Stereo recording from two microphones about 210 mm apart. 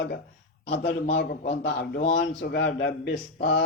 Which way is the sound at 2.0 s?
35° left (ahead or behind).